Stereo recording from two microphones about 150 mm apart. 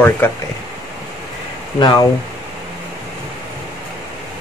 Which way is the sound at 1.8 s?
30° left (ahead or behind).